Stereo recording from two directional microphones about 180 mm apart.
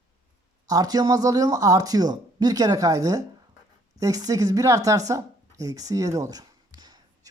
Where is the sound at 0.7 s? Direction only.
20° right (ahead or behind).